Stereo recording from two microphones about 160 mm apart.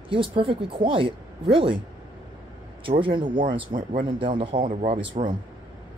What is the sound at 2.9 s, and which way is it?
Speech, 30° right (ahead or behind).